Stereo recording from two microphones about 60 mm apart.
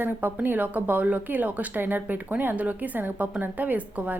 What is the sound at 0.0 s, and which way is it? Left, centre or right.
Speech, right.